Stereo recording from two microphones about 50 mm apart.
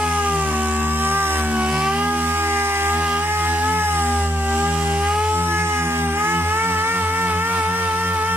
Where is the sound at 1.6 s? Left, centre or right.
Right.